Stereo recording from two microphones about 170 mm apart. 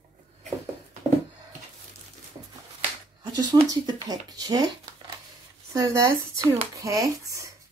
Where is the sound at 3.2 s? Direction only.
25° right (ahead or behind).